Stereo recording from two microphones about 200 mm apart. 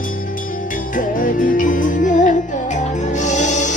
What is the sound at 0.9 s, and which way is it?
Music, 40° left (ahead or behind).